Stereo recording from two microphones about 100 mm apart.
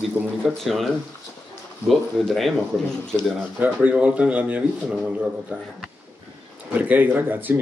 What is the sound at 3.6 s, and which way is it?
Speech, 15° right (ahead or behind).